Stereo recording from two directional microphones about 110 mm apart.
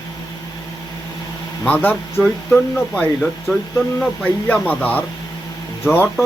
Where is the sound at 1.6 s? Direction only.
15° left (ahead or behind).